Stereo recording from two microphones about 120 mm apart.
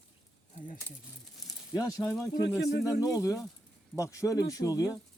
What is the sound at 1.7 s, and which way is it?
Speech, 30° left (ahead or behind).